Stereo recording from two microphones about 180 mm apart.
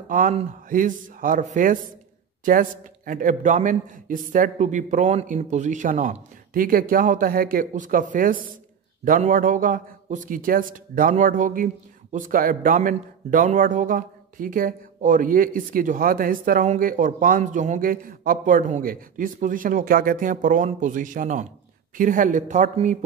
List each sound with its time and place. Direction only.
0.1 s a man's voice: 45° right (ahead or behind)